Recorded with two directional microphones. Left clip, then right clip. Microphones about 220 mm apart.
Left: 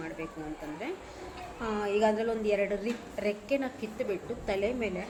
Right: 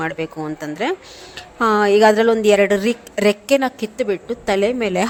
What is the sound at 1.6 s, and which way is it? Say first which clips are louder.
A woman's voice: right 16 dB; 50° right (ahead or behind).